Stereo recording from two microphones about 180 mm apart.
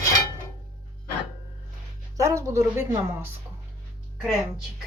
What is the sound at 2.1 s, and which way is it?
A woman's voice, 15° right (ahead or behind).